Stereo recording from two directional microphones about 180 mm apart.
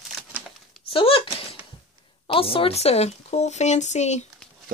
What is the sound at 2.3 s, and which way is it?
Speech, 30° left (ahead or behind).